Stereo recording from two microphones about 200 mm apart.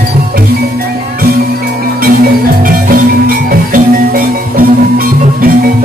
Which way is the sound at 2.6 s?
45° right (ahead or behind).